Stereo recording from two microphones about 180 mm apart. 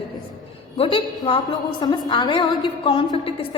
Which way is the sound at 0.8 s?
30° left (ahead or behind).